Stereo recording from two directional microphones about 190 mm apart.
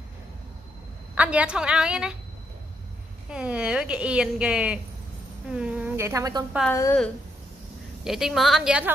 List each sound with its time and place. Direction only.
1.1 s a woman's voice: 5° right (ahead or behind)
3.3 s a woman's voice: 5° right (ahead or behind)
6.7 s a woman's voice: 15° left (ahead or behind)
8.0 s a woman's voice: centre (ahead or behind)